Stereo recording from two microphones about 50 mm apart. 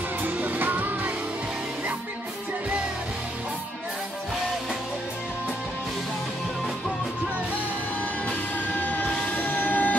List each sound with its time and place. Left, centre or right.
0.2 s music: right
8.7 s train: left
9.0 s a sound: left